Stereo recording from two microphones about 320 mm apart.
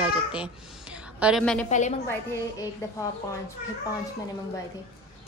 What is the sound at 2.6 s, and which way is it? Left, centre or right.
Speech, centre.